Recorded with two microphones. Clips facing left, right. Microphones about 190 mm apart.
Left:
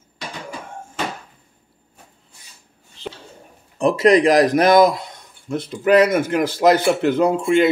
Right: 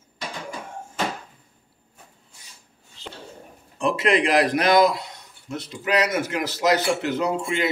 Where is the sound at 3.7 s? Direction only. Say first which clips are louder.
Left 7 dB; 40° left (ahead or behind).